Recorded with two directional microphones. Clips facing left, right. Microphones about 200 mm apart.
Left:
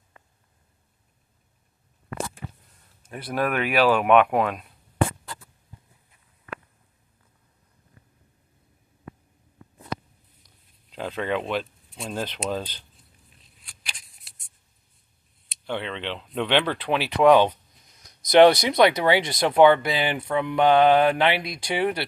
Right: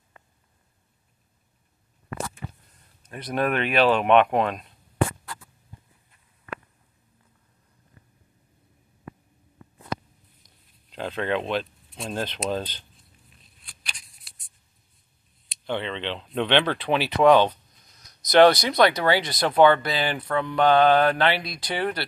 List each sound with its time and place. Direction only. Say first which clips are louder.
3.1 s speech: right 1 dB; 5° left (ahead or behind)
10.9 s speech: right 1 dB; 10° left (ahead or behind)
15.6 s speech: right 1 dB; 5° left (ahead or behind)
18.3 s speech: left 1 dB; 15° left (ahead or behind)